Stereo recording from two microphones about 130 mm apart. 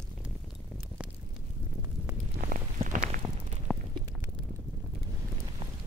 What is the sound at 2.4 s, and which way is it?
Walk, 90° right.